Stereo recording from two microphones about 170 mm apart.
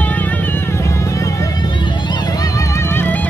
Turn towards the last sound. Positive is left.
turn(degrees=10)  # may be behind; listen again after turning